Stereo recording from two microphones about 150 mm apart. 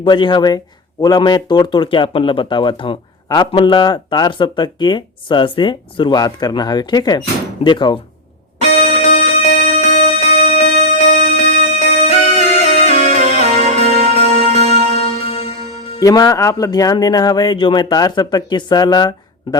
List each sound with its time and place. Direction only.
0.0 s speech: 30° left (ahead or behind)
8.6 s music: 45° left (ahead or behind)
16.0 s speech: 25° left (ahead or behind)